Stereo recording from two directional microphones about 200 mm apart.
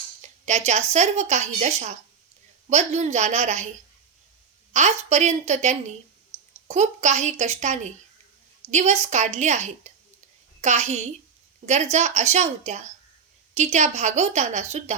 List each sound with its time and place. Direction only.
0.2 s a woman's voice: 35° right (ahead or behind)
4.7 s a woman's voice: 35° right (ahead or behind)